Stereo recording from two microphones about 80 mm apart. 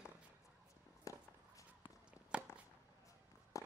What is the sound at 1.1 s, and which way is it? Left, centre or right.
Walk, left.